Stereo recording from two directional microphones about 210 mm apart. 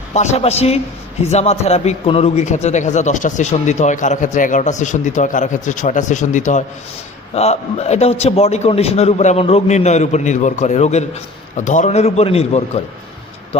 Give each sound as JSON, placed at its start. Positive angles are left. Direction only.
{"t": 0.1, "sound": "a man's voice", "side_deg": 30}